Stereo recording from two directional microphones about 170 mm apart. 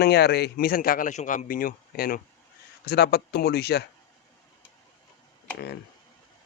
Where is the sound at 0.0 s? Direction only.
75° left (ahead or behind); by 2.2 s 55° left (ahead or behind).